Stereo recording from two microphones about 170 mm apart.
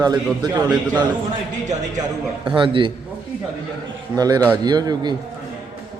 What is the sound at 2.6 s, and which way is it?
Speech, 30° right (ahead or behind).